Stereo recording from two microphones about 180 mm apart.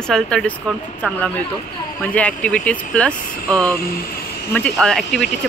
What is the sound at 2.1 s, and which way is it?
Speech, 5° left (ahead or behind).